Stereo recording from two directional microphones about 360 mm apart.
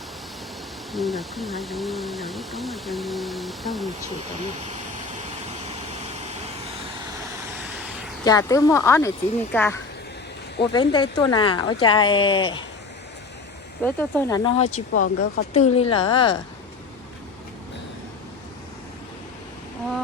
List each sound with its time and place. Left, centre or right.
0.9 s speech: centre
5.5 s vehicle: centre
8.2 s speech: centre
13.8 s speech: centre
14.9 s speech: left
15.5 s speech: centre